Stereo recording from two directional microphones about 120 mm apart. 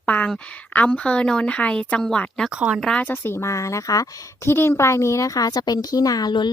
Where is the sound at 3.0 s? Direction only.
20° left (ahead or behind).